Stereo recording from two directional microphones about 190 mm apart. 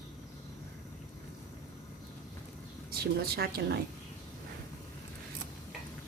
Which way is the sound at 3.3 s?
55° right (ahead or behind).